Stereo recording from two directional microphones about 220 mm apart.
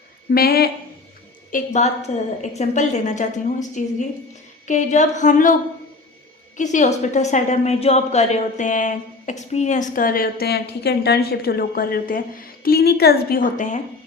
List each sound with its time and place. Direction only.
0.3 s a woman's voice: 45° left (ahead or behind)
6.6 s a woman's voice: 35° left (ahead or behind)